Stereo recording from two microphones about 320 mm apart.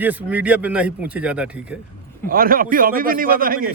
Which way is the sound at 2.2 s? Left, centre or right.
Right.